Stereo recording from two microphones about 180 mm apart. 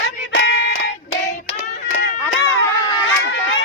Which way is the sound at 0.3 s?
75° left (ahead or behind).